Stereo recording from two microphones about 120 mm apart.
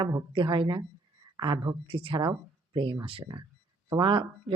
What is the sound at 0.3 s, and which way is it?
Speech, 40° right (ahead or behind).